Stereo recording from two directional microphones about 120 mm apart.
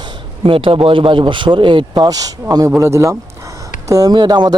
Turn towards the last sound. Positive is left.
turn(degrees=-35)  # may be behind; listen again after turning